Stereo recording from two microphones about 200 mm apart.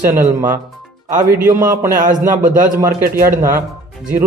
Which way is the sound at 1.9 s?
40° right (ahead or behind).